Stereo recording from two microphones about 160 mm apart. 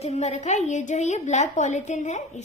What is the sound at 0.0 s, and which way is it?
A woman's voice, 45° left (ahead or behind).